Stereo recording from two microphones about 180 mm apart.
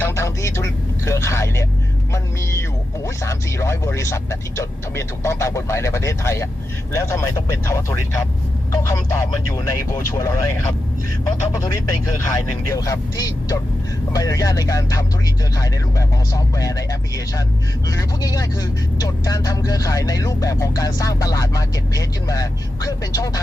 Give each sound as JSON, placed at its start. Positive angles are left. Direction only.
{"t": 0.0, "sound": "vehicle", "side_deg": 15}
{"t": 2.1, "sound": "speech", "side_deg": 15}
{"t": 11.5, "sound": "speech", "side_deg": 20}